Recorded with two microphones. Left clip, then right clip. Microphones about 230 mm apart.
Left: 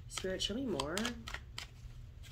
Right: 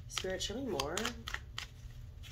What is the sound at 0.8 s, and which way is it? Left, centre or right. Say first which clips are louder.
Shuffling cards: right 1 dB; centre.